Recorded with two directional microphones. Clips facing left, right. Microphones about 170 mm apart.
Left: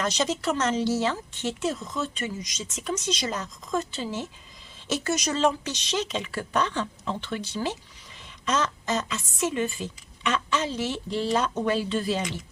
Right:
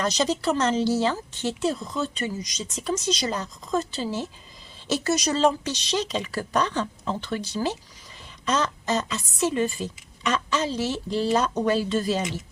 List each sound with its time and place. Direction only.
0.0 s speech: 35° right (ahead or behind)